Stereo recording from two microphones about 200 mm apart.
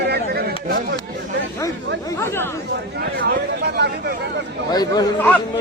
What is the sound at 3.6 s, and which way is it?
Chatter, 55° right (ahead or behind).